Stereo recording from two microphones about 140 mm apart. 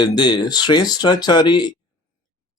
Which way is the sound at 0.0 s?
30° left (ahead or behind).